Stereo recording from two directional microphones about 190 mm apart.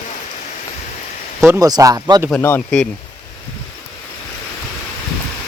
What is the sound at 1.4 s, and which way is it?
Speech, 15° right (ahead or behind).